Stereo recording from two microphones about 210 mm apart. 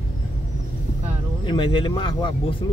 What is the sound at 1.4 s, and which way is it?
Speech, 25° left (ahead or behind).